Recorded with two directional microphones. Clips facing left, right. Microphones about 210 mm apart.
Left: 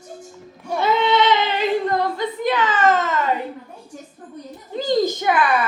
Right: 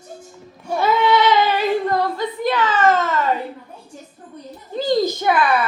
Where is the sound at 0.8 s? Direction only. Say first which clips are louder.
Right 1 dB; 20° left (ahead or behind).